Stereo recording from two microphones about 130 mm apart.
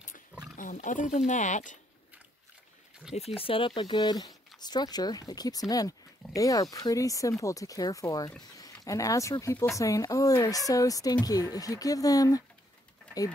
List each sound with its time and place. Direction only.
0.3 s pig: 5° right (ahead or behind)
0.6 s speech: 80° left
3.2 s speech: 50° left (ahead or behind); by 12.4 s 30° left (ahead or behind)